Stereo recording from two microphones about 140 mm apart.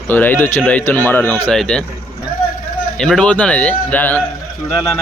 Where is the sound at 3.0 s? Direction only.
5° left (ahead or behind).